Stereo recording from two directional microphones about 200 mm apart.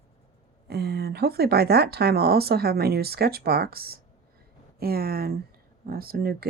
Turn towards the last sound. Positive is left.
turn(degrees=-50)  # may be behind; listen again after turning